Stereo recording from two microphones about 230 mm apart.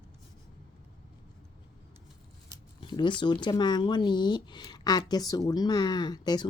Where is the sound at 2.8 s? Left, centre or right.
Centre.